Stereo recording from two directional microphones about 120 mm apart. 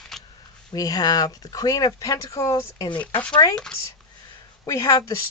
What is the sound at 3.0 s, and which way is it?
Speech, 10° left (ahead or behind).